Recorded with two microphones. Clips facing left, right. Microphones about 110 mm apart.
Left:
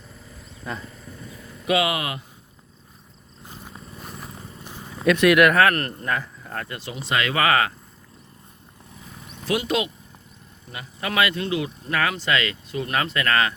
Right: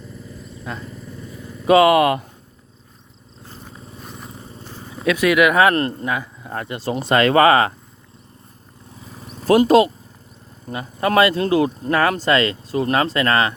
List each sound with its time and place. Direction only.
0.7 s speech: centre (ahead or behind)
1.6 s speech: 40° right (ahead or behind)
4.0 s vehicle: centre (ahead or behind)
4.6 s purr: 15° left (ahead or behind)
4.9 s speech: centre (ahead or behind)
5.5 s a man's voice: 20° right (ahead or behind)
6.9 s speech: 45° right (ahead or behind)
9.2 s speech: 40° right (ahead or behind)